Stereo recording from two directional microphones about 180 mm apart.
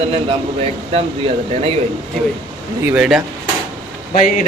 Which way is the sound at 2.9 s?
5° right (ahead or behind).